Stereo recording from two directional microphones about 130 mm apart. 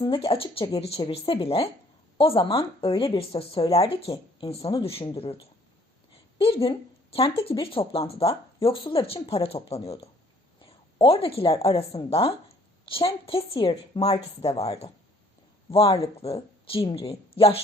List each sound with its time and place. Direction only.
0.0 s a woman's voice: 40° left (ahead or behind)